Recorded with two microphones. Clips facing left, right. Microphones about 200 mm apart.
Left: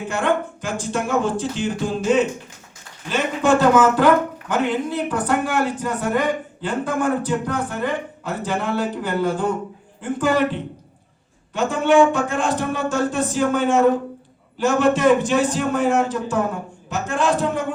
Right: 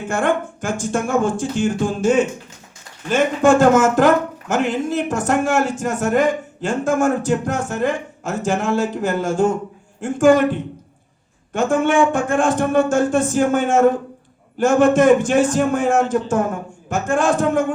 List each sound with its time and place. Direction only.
0.1 s a man's voice: 50° right (ahead or behind)